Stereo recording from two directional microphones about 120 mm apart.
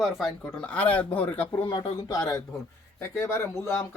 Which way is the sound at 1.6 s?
45° left (ahead or behind).